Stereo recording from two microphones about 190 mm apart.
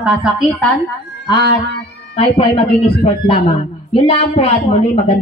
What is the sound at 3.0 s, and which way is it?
Speech, 30° left (ahead or behind).